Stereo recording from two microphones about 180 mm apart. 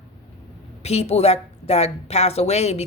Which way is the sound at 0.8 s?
35° left (ahead or behind).